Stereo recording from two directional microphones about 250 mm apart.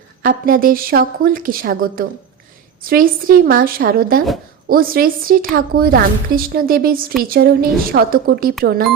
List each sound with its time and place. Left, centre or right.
0.2 s a woman's voice: right